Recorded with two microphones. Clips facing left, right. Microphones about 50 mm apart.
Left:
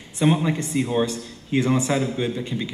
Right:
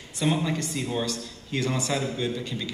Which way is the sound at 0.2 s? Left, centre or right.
Left.